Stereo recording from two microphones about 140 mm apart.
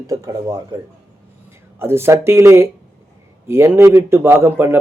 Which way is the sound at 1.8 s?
15° right (ahead or behind).